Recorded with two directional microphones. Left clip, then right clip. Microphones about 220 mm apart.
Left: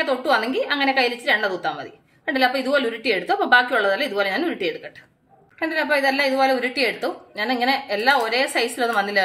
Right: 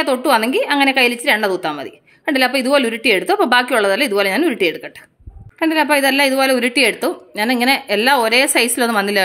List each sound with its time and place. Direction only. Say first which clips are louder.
0.0 s a woman's voice: right 5 dB; 45° right (ahead or behind)